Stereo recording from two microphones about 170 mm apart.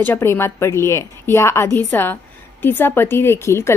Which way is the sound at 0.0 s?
15° left (ahead or behind).